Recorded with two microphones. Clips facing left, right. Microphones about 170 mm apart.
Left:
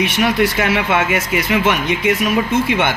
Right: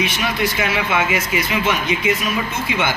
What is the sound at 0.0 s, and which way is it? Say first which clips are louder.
Speech: left 5 dB; 65° left (ahead or behind).